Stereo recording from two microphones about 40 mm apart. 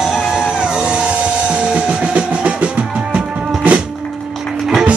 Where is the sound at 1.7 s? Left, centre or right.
Right.